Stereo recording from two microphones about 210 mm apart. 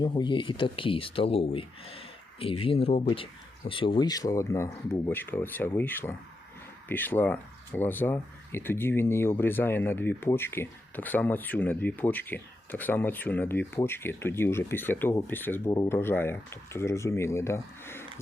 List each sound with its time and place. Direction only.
0.0 s speech: 20° left (ahead or behind)